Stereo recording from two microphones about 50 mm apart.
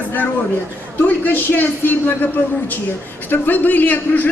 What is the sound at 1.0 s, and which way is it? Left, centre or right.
A man's voice, left.